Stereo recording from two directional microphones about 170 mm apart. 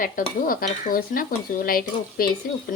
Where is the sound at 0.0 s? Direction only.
55° left (ahead or behind).